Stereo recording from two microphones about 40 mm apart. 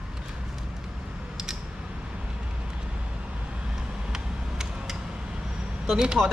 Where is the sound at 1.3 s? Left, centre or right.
Centre.